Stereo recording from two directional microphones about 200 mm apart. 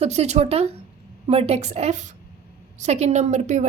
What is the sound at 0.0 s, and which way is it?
A woman's voice, 30° right (ahead or behind).